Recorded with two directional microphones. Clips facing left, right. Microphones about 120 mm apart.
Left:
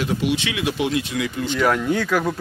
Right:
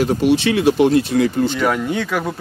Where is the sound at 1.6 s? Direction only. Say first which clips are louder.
Right 1 dB; centre (ahead or behind).